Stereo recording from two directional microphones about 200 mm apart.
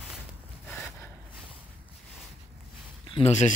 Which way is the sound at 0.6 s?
5° left (ahead or behind).